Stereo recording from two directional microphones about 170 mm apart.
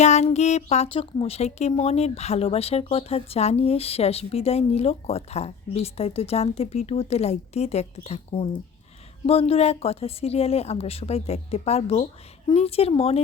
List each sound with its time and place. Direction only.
0.0 s speech: 40° left (ahead or behind)